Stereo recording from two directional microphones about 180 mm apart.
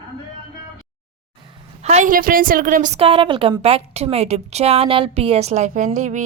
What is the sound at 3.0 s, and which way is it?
A woman's voice, 30° right (ahead or behind).